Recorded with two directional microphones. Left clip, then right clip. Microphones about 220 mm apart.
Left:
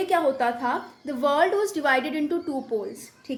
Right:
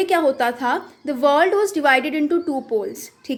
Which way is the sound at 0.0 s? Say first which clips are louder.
Right 4 dB; 30° right (ahead or behind).